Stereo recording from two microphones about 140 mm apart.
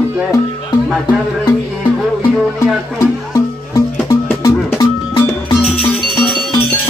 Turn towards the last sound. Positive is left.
turn(degrees=25)  # may be behind; listen again after turning